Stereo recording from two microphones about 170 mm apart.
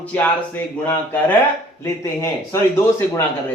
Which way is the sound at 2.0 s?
15° left (ahead or behind).